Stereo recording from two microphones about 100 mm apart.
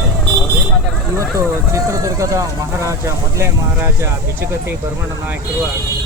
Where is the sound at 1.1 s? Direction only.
30° right (ahead or behind).